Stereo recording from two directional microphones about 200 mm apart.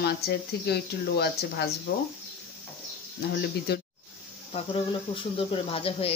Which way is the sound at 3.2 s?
55° left (ahead or behind).